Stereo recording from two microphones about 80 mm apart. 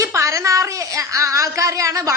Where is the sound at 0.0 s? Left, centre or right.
Right.